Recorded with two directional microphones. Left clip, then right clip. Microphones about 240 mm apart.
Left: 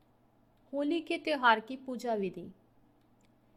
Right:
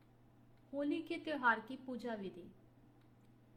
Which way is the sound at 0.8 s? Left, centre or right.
Left.